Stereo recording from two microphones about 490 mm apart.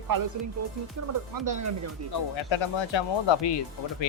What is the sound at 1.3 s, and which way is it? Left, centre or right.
Speech, right.